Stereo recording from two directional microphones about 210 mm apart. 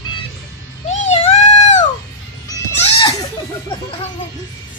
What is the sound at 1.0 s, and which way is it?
Baby cry, 30° left (ahead or behind).